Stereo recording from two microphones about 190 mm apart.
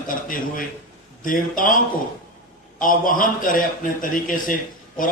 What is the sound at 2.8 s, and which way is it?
A man's voice, 45° left (ahead or behind).